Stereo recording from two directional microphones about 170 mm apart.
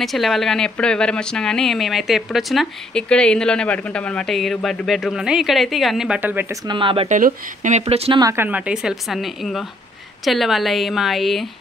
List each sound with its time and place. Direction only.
0.0 s speech: centre (ahead or behind)
6.7 s speech: 30° right (ahead or behind)
7.1 s speech: 50° right (ahead or behind)
8.2 s speech: 15° right (ahead or behind); by 11.4 s centre (ahead or behind)